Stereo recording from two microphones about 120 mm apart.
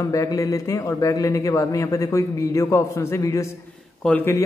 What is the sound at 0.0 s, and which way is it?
A man's voice, 30° left (ahead or behind).